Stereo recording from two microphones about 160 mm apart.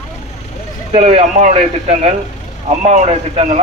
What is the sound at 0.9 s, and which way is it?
Speech, 50° right (ahead or behind).